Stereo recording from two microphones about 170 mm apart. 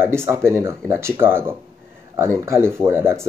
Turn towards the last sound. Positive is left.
turn(degrees=-15)  # may be behind; listen again after turning